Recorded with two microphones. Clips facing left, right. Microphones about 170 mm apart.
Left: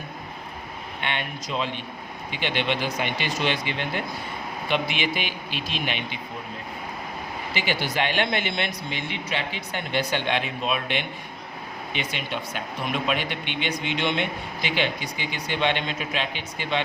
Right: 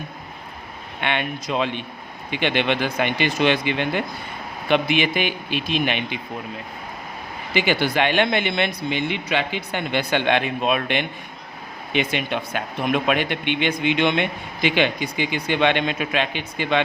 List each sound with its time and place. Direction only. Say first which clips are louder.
1.0 s speech: right 6 dB; 65° right (ahead or behind)
4.7 s speech: right 7 dB; 55° right (ahead or behind)
7.5 s speech: right 7 dB; 65° right (ahead or behind)